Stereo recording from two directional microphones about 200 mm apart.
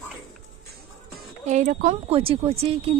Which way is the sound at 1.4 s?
35° right (ahead or behind).